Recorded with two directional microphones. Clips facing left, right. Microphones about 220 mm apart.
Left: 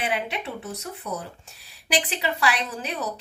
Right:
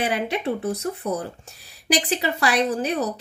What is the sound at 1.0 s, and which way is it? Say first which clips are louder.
A woman's voice: right 6 dB; 45° right (ahead or behind).